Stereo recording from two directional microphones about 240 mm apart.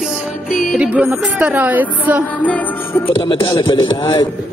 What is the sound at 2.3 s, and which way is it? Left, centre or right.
Music, centre.